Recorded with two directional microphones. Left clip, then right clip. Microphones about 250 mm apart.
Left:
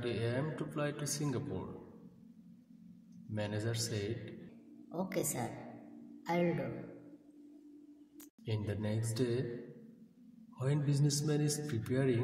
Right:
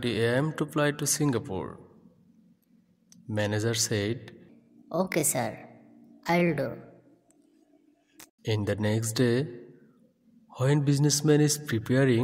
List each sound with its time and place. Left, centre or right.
0.0 s a man's voice: right
3.3 s a man's voice: right
8.5 s a man's voice: right
10.5 s a man's voice: right